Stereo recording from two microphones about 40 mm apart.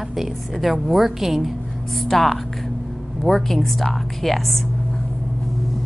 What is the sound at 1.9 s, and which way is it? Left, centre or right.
A woman's voice, centre.